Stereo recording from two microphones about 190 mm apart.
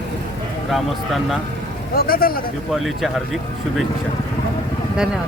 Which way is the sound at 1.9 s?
50° left (ahead or behind).